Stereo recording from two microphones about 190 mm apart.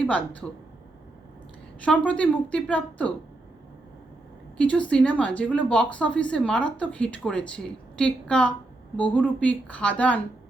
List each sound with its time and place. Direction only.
0.0 s speech: 5° left (ahead or behind)
2.0 s speech: 5° left (ahead or behind)
4.5 s speech: 5° left (ahead or behind)